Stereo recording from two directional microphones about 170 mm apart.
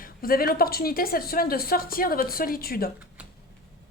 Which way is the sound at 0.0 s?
60° left (ahead or behind).